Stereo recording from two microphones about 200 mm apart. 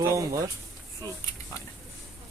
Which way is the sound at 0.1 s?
15° right (ahead or behind).